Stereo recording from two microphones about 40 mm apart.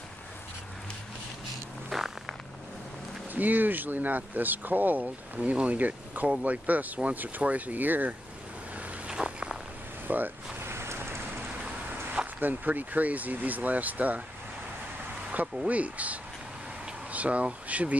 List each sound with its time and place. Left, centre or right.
1.9 s a sound: centre
3.3 s speech: right
5.0 s speech: right
9.1 s walk: right
10.0 s speech: right
10.6 s vehicle: right
12.4 s speech: right
15.6 s speech: right